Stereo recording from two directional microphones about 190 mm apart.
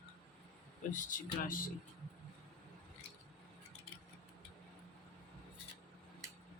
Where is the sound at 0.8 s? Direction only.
45° left (ahead or behind).